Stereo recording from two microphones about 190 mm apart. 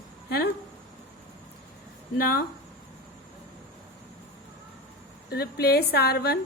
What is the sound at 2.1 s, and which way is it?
Speech, 55° left (ahead or behind).